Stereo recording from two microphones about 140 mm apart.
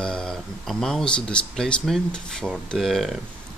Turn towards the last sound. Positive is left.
turn(degrees=0)  # may be behind; listen again after turning